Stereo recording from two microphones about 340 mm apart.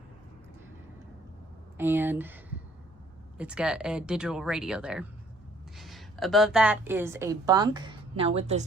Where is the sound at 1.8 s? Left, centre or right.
Centre.